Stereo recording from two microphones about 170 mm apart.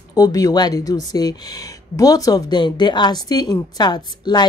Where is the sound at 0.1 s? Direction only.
20° left (ahead or behind).